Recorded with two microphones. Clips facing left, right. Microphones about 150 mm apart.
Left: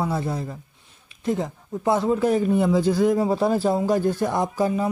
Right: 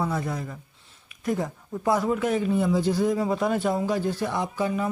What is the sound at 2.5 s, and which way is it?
Speech, 65° left (ahead or behind).